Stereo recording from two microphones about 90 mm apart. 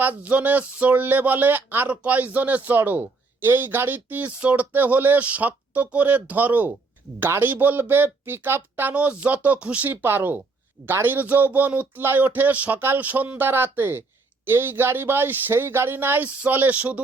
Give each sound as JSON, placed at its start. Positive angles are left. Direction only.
{"t": 0.0, "sound": "speech", "side_deg": -20}